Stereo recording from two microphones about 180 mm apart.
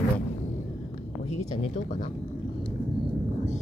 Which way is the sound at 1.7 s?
40° left (ahead or behind).